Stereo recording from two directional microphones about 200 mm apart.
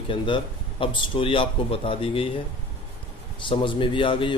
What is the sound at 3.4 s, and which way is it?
Speech, 25° left (ahead or behind).